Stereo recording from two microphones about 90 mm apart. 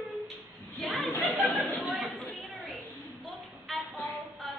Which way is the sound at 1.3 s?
Centre (ahead or behind).